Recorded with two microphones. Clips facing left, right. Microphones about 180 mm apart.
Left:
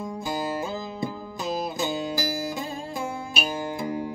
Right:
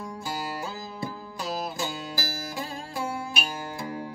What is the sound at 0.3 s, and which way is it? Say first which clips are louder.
Music: left 5 dB; 20° left (ahead or behind).